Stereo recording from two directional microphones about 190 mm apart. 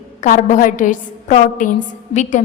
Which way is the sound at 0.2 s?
40° left (ahead or behind).